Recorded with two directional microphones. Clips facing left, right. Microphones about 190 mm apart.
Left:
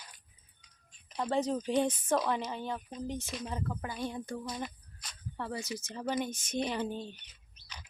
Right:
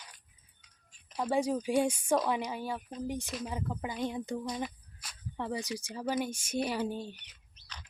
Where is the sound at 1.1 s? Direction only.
5° right (ahead or behind).